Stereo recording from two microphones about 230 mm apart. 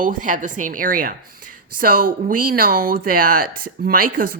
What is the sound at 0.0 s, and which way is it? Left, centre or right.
A woman's voice, right.